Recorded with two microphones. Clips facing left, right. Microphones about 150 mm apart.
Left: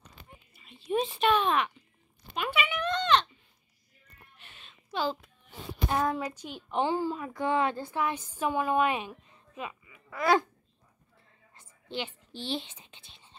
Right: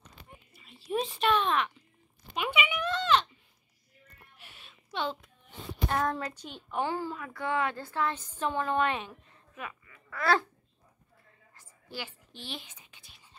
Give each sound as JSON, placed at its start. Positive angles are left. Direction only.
{"t": 0.5, "sound": "speech", "side_deg": 0}
{"t": 2.3, "sound": "a sound", "side_deg": -15}
{"t": 4.4, "sound": "a sound", "side_deg": -10}
{"t": 4.9, "sound": "a child's voice", "side_deg": 0}
{"t": 6.7, "sound": "speech", "side_deg": 20}
{"t": 7.7, "sound": "a woman's voice", "side_deg": 15}
{"t": 11.5, "sound": "whispering", "side_deg": 25}